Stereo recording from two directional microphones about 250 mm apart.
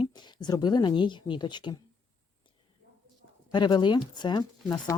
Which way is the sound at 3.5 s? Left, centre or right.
Centre.